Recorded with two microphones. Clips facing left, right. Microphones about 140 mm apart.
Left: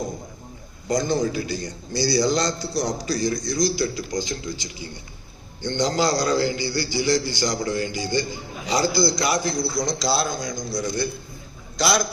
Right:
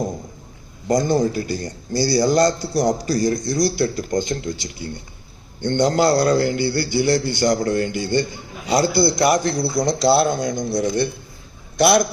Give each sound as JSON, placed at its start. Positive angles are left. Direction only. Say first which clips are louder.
{"t": 0.9, "sound": "a man's voice", "louder": "right 4 dB", "side_deg": -50}